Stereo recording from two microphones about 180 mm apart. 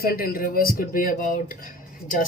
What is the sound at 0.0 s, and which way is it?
A man's voice, 55° left (ahead or behind).